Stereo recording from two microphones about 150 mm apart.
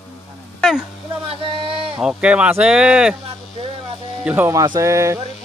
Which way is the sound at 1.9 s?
5° right (ahead or behind).